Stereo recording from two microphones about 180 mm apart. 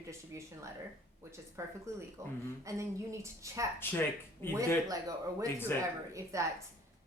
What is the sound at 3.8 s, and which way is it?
Speech, 10° left (ahead or behind).